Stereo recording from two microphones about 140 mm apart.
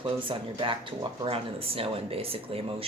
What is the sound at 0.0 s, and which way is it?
Speech, 40° right (ahead or behind).